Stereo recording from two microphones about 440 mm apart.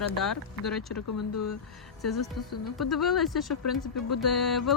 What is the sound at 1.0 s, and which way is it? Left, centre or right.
Speech, left.